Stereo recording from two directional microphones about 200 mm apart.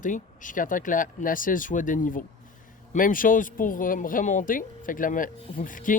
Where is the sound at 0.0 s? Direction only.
40° left (ahead or behind).